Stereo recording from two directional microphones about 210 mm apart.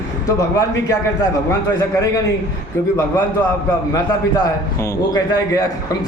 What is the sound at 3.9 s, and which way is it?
Speech, 15° left (ahead or behind).